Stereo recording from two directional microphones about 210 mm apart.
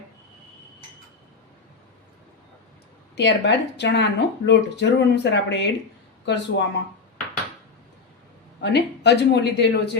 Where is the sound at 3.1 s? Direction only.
55° left (ahead or behind).